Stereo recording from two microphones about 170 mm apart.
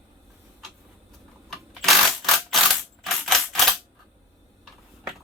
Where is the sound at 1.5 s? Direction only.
Centre (ahead or behind).